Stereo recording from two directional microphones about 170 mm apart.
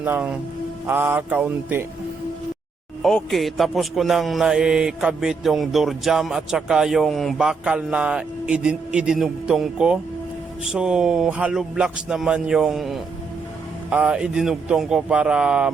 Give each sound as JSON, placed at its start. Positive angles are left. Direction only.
{"t": 0.0, "sound": "mantra", "side_deg": -10}
{"t": 3.0, "sound": "a man's voice", "side_deg": 0}